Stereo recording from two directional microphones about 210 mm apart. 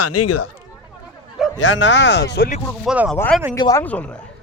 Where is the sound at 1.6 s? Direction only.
60° left (ahead or behind).